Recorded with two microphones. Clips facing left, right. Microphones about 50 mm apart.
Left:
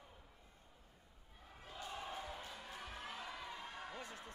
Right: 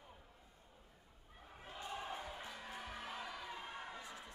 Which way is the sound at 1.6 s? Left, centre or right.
Centre.